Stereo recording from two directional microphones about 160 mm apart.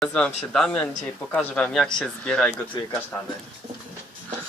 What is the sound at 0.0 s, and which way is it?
Speech, 5° left (ahead or behind).